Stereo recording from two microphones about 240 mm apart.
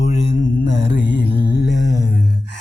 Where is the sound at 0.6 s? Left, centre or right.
Left.